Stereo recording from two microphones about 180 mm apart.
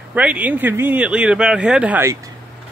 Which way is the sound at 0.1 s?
10° right (ahead or behind).